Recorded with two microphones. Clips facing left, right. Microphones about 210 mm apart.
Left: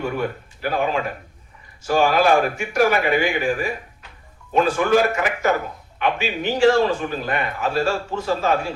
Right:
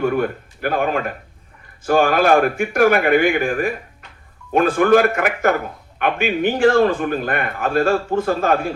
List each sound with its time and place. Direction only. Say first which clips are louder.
0.0 s a man's voice: right 5 dB; 55° right (ahead or behind)